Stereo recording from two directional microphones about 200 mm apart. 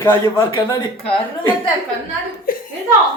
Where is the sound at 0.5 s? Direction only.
25° left (ahead or behind).